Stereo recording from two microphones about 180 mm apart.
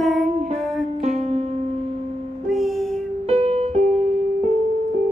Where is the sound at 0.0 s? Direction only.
Centre (ahead or behind).